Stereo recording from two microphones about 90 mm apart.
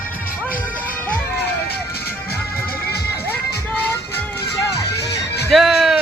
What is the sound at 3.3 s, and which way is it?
Music, 20° left (ahead or behind).